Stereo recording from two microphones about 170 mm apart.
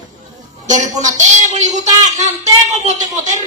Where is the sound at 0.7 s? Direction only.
45° right (ahead or behind).